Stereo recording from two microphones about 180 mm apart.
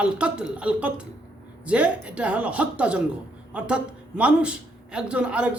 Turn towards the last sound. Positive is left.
turn(degrees=-5)  # may be behind; listen again after turning